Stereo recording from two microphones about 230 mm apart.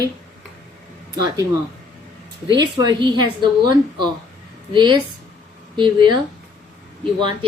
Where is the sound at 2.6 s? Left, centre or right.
Centre.